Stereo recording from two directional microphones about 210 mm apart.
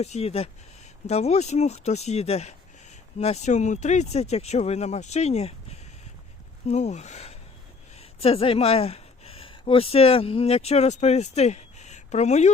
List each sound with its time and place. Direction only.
0.0 s speech: 30° left (ahead or behind)